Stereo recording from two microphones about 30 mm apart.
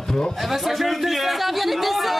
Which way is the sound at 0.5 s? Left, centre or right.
Centre.